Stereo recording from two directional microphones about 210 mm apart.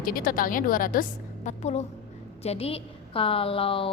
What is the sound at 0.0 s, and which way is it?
A woman's voice, 45° left (ahead or behind).